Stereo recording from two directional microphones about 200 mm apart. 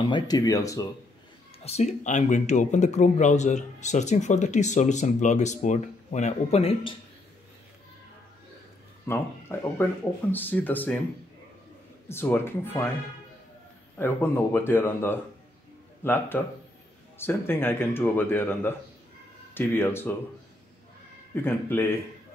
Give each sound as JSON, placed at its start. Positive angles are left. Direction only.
{"t": 0.0, "sound": "speech", "side_deg": 20}
{"t": 1.6, "sound": "speech", "side_deg": 30}
{"t": 9.0, "sound": "speech", "side_deg": 10}
{"t": 12.1, "sound": "speech", "side_deg": 10}
{"t": 13.9, "sound": "speech", "side_deg": 10}
{"t": 21.5, "sound": "speech", "side_deg": 10}